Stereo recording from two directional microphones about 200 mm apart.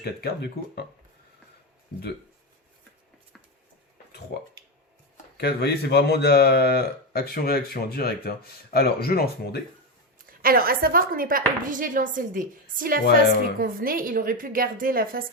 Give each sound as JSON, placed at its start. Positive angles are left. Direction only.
{"t": 0.0, "sound": "a man's voice", "side_deg": 55}
{"t": 4.3, "sound": "a man's voice", "side_deg": 55}
{"t": 10.4, "sound": "a woman's voice", "side_deg": -50}